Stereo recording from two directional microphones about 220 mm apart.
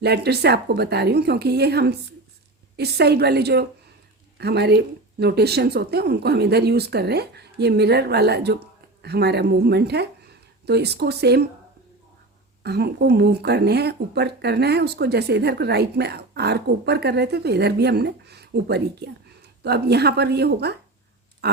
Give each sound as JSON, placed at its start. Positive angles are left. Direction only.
{"t": 0.0, "sound": "speech", "side_deg": -50}
{"t": 12.6, "sound": "speech", "side_deg": -45}
{"t": 21.4, "sound": "a sound", "side_deg": -50}